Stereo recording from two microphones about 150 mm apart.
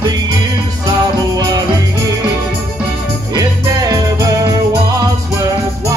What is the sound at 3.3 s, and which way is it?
Music, 25° right (ahead or behind).